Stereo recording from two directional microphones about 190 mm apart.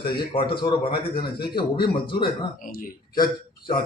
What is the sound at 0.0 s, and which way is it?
Speech, 25° left (ahead or behind).